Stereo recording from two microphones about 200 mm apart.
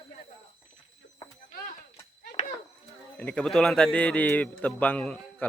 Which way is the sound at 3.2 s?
5° left (ahead or behind).